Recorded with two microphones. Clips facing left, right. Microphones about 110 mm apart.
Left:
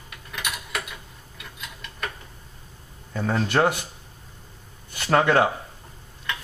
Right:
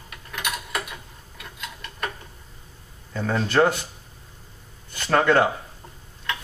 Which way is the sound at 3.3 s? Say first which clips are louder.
Right 2 dB; 10° left (ahead or behind).